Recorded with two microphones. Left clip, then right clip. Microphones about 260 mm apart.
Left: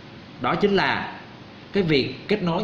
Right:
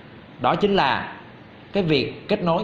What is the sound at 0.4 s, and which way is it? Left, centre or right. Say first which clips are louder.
A man's voice: right 2 dB; centre.